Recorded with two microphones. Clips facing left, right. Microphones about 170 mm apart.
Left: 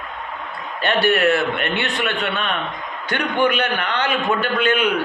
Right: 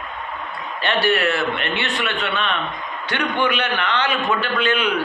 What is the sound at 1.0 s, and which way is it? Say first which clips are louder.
A man's voice: left 3 dB; 50° left (ahead or behind).